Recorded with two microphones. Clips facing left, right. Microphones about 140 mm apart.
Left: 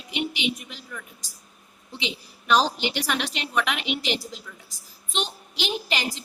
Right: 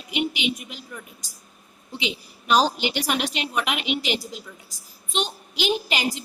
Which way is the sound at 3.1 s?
10° right (ahead or behind).